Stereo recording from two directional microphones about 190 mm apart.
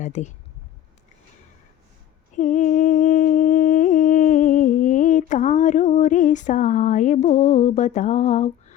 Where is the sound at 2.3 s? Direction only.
40° left (ahead or behind).